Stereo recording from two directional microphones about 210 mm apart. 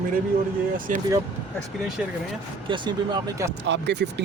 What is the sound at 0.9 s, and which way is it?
Speech, 40° right (ahead or behind).